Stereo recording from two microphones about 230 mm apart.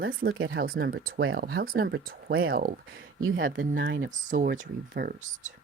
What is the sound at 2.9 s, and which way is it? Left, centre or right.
Speech, right.